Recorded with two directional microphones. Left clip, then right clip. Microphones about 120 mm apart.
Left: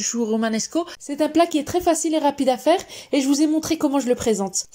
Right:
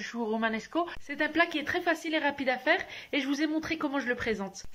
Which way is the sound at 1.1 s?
45° left (ahead or behind).